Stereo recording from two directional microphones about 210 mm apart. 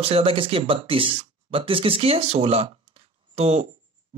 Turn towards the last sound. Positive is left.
turn(degrees=-30)  # may be behind; listen again after turning